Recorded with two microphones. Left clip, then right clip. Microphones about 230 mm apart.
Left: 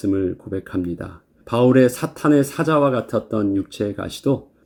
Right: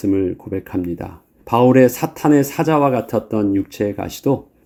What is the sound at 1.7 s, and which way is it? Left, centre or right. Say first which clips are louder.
Speech: right 2 dB; right.